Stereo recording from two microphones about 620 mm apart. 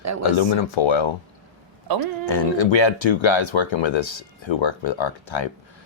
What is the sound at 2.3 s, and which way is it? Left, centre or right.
Speech, left.